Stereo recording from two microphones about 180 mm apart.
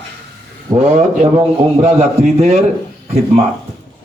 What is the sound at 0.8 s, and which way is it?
A man's voice, 40° right (ahead or behind).